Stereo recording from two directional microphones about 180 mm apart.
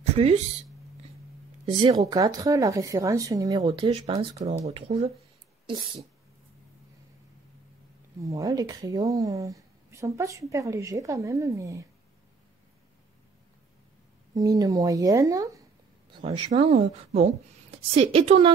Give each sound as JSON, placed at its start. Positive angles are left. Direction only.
{"t": 0.0, "sound": "a sound", "side_deg": -35}
{"t": 1.7, "sound": "speech", "side_deg": -25}
{"t": 4.0, "sound": "a woman's voice", "side_deg": -35}
{"t": 8.2, "sound": "speech", "side_deg": -20}
{"t": 14.3, "sound": "speech", "side_deg": -20}
{"t": 16.2, "sound": "a woman's voice", "side_deg": -35}